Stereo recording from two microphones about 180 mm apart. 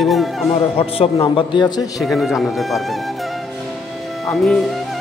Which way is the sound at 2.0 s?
Centre (ahead or behind).